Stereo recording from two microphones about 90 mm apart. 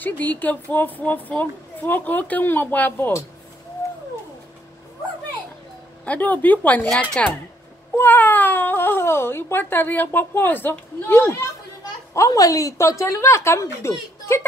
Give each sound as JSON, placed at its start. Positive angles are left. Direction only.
{"t": 0.0, "sound": "speech", "side_deg": 20}
{"t": 6.0, "sound": "speech", "side_deg": 20}
{"t": 12.1, "sound": "a woman's voice", "side_deg": 40}